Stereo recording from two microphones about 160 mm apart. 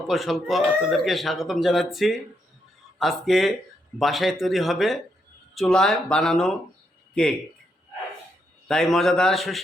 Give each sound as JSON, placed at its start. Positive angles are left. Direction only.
{"t": 0.1, "sound": "speech", "side_deg": 0}
{"t": 8.6, "sound": "speech", "side_deg": 0}